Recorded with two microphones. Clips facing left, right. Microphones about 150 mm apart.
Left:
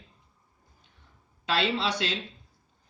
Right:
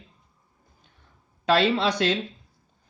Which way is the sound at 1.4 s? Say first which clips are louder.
Right 7 dB; 45° right (ahead or behind).